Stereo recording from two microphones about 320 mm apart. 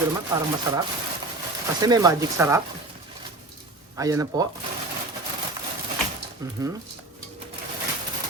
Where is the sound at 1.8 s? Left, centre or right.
Centre.